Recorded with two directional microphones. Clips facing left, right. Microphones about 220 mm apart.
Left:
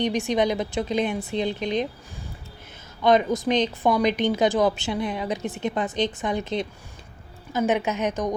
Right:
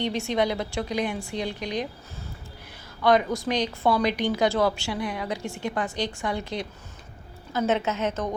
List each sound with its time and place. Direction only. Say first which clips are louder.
0.0 s a woman's voice: left 3 dB; 15° left (ahead or behind)
3.0 s a woman's voice: left 2 dB; 20° left (ahead or behind)